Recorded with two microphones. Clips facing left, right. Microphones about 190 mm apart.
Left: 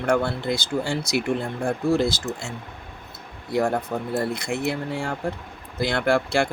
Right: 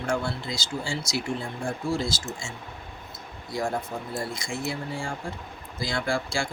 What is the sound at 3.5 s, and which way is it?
Speech, 65° left (ahead or behind).